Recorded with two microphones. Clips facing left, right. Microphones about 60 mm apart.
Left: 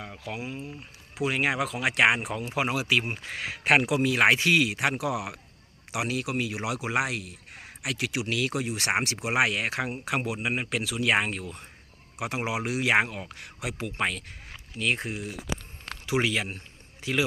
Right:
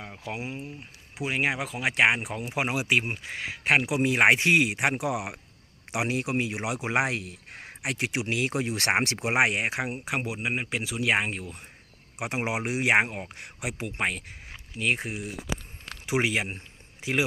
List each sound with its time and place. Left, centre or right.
0.0 s speech: centre
1.1 s speech: centre
2.3 s speech: centre
3.2 s speech: centre
4.0 s speech: right
5.9 s speech: right
7.8 s speech: right
8.6 s speech: right; by 10.0 s centre
10.1 s speech: centre
12.2 s speech: right; by 15.4 s centre
16.0 s speech: centre